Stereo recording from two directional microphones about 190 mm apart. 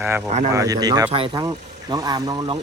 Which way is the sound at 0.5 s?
20° right (ahead or behind).